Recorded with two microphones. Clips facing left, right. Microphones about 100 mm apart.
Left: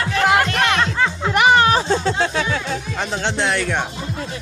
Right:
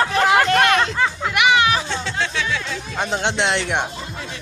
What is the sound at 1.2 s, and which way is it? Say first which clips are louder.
Music: left 3 dB; 40° left (ahead or behind).